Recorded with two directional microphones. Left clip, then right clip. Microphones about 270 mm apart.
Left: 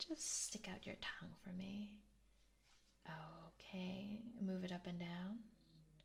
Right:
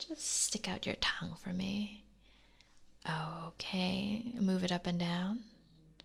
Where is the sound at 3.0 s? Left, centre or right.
Right.